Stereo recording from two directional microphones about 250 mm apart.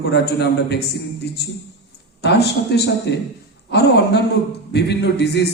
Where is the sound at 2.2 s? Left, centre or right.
Left.